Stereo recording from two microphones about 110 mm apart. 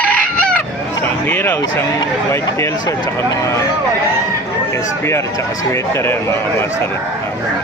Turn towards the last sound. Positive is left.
turn(degrees=25)  # may be behind; listen again after turning